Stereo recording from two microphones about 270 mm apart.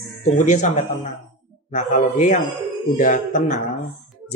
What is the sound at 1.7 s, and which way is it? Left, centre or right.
Speech, left.